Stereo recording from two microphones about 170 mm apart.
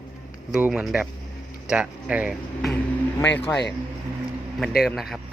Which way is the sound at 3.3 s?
90° left.